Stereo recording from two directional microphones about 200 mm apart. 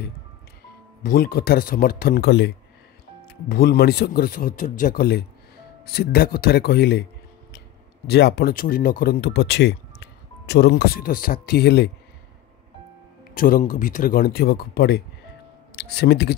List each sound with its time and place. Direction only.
1.0 s speech: 50° left (ahead or behind)
8.1 s speech: 55° left (ahead or behind)
13.3 s speech: 45° left (ahead or behind)